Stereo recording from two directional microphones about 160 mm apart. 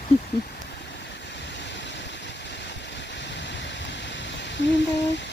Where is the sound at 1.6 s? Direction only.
90° left.